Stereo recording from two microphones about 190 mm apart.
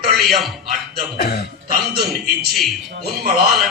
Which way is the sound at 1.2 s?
60° left (ahead or behind).